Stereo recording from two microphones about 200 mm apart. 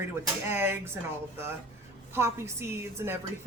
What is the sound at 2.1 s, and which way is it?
A woman's voice, 15° right (ahead or behind).